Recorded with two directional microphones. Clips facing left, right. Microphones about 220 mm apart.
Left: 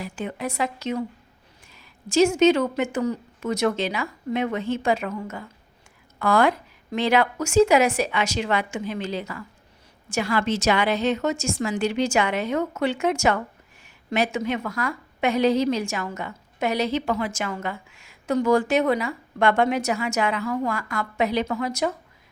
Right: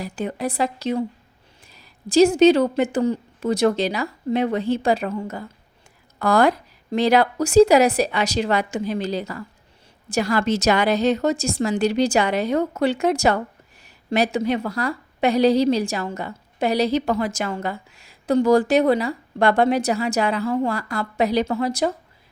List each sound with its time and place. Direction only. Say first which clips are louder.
0.0 s a woman's voice: right 4 dB; 35° right (ahead or behind)